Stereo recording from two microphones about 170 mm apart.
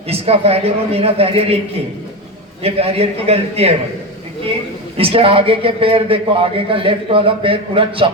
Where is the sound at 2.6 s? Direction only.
35° right (ahead or behind).